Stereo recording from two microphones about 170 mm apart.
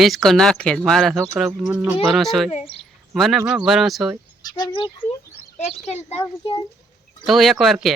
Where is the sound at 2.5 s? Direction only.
35° left (ahead or behind).